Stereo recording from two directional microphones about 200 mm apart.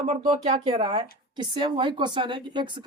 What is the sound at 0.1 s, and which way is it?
A woman's voice, 30° right (ahead or behind).